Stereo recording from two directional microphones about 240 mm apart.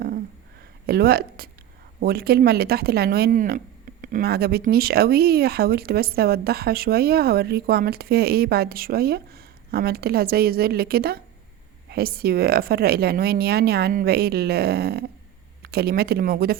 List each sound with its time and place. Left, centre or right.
0.9 s speech: right